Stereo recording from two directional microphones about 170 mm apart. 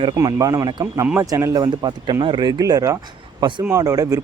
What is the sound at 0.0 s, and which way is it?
Speech, 25° right (ahead or behind).